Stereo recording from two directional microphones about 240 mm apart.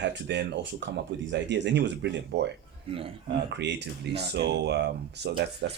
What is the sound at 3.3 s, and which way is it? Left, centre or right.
Speech, right.